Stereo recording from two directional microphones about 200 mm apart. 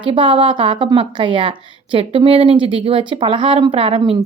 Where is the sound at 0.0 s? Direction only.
25° right (ahead or behind).